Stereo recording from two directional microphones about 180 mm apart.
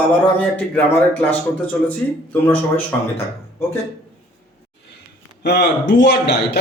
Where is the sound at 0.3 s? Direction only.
10° left (ahead or behind).